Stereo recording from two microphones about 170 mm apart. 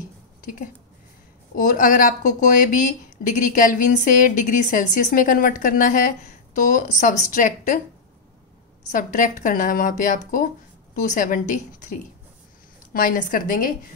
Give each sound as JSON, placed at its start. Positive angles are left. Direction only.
{"t": 0.4, "sound": "a sound", "side_deg": 55}
{"t": 1.5, "sound": "speech", "side_deg": 50}
{"t": 8.9, "sound": "a woman's voice", "side_deg": 50}